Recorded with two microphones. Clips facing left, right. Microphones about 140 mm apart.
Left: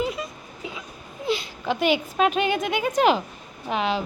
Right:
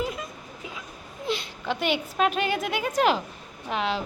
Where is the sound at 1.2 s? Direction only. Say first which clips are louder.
Left 4 dB; centre (ahead or behind).